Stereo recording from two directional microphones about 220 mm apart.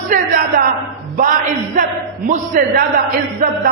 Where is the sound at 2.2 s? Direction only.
40° right (ahead or behind).